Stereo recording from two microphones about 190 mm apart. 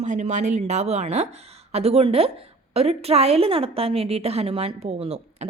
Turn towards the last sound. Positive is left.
turn(degrees=-35)  # may be behind; listen again after turning